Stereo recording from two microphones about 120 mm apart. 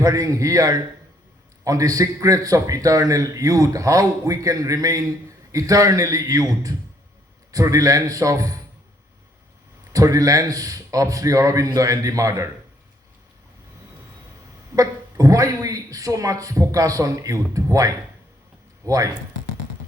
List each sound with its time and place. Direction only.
0.0 s a man's voice: 30° right (ahead or behind)
9.9 s a man's voice: 30° right (ahead or behind)
14.8 s a man's voice: 30° right (ahead or behind)